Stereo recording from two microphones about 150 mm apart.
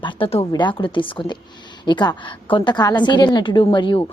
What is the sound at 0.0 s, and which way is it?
A woman's voice, 40° left (ahead or behind).